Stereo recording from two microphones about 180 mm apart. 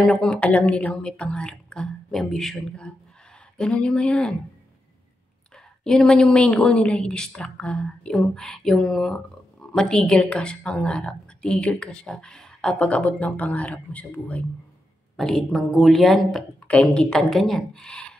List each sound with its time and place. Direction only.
0.0 s speech: 5° left (ahead or behind)
5.9 s speech: 5° left (ahead or behind)